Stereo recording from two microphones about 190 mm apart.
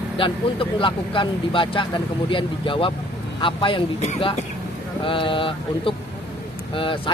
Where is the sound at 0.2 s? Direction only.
25° left (ahead or behind).